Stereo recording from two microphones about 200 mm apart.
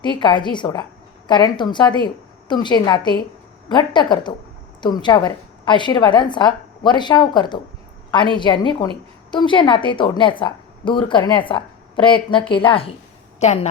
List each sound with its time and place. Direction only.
0.0 s a woman's voice: 25° left (ahead or behind)